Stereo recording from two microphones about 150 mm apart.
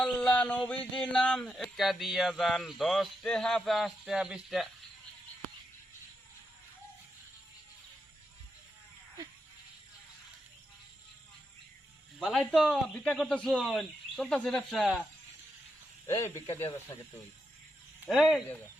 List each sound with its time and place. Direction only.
0.3 s speech: 10° left (ahead or behind)
12.2 s speech: centre (ahead or behind)
16.0 s speech: 20° left (ahead or behind)
18.0 s speech: centre (ahead or behind)